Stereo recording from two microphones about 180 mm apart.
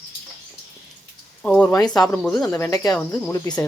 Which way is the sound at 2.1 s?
5° left (ahead or behind).